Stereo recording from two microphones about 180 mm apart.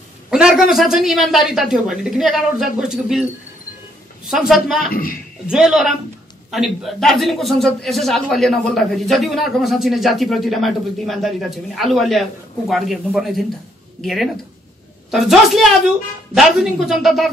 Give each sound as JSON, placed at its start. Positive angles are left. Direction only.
{"t": 0.3, "sound": "a man's voice", "side_deg": -5}
{"t": 4.3, "sound": "a man's voice", "side_deg": 0}
{"t": 4.9, "sound": "a man's voice", "side_deg": 55}
{"t": 5.5, "sound": "a man's voice", "side_deg": -5}